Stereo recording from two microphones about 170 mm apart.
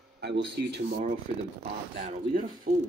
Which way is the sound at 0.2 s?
75° right (ahead or behind).